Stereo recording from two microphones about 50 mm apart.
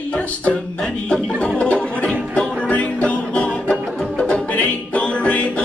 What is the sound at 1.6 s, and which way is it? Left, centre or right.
Music, left.